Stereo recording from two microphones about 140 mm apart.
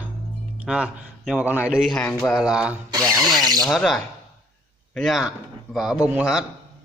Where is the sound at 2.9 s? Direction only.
25° right (ahead or behind).